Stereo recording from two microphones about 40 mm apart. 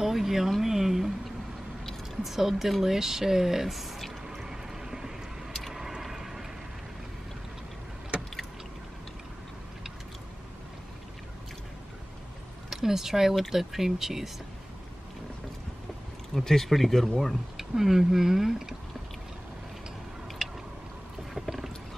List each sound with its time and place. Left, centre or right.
0.0 s a sound: centre
2.2 s speech: centre
4.4 s vehicle: centre
5.5 s vehicle: centre
8.1 s vehicle: right
12.6 s speech: centre
16.3 s speech: centre
17.6 s speech: centre
21.3 s boat: centre